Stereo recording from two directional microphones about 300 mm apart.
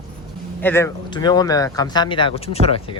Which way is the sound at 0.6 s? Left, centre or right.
Centre.